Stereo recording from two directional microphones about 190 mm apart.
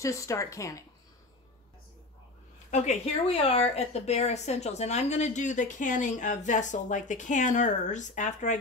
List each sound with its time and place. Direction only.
0.0 s speech: 15° left (ahead or behind)
2.7 s a woman's voice: 35° left (ahead or behind)